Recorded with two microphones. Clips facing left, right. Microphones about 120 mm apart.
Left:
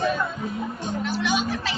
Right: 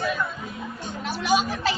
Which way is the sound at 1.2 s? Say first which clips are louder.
Right 6 dB; 35° right (ahead or behind).